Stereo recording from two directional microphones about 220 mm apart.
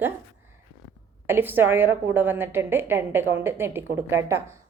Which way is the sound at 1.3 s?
10° right (ahead or behind).